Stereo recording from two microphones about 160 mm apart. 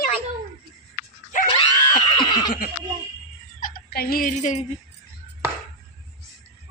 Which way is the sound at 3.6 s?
70° left (ahead or behind).